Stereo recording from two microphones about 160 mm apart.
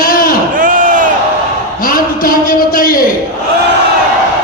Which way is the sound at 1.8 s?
65° left (ahead or behind).